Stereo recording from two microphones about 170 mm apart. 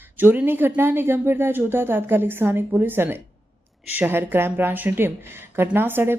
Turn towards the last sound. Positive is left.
turn(degrees=-15)  # may be behind; listen again after turning